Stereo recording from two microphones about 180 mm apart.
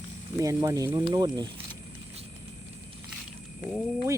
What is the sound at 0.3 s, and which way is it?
Speech, 15° right (ahead or behind).